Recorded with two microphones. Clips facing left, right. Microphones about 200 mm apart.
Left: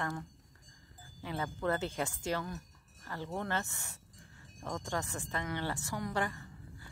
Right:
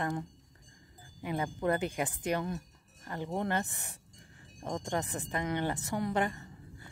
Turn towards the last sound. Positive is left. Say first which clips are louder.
# right 1 dB
turn(degrees=-20)  # may be behind; listen again after turning